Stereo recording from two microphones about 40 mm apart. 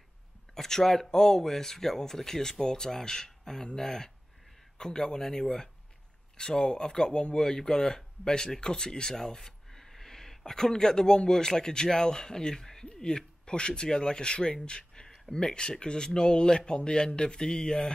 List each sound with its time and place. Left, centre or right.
0.6 s speech: centre